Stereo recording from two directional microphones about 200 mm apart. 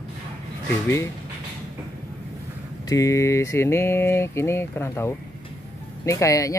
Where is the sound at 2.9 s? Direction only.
15° left (ahead or behind).